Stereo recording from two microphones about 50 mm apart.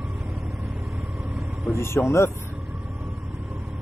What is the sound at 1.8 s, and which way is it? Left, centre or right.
Speech, left.